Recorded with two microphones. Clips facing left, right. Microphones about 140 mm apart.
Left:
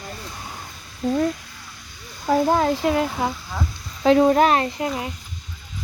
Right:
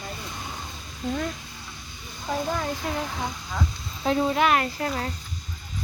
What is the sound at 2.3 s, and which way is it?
Speech, 90° left.